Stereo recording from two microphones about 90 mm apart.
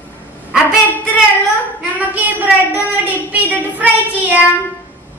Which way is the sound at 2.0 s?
20° right (ahead or behind).